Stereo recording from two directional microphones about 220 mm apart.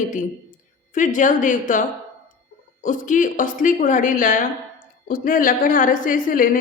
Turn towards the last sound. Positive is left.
turn(degrees=40)  # may be behind; listen again after turning